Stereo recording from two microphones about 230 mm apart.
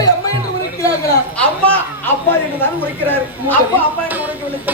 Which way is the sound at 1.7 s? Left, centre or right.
Centre.